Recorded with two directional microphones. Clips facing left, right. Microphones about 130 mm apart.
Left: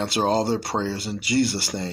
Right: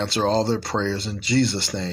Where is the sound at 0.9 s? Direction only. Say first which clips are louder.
Right 2 dB; 5° left (ahead or behind).